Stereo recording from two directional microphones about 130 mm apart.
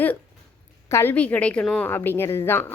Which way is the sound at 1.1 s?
10° left (ahead or behind).